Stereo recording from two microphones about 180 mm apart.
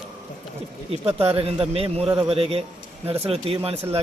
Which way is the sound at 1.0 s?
35° right (ahead or behind).